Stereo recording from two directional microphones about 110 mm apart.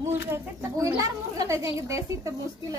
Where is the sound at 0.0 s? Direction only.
25° right (ahead or behind).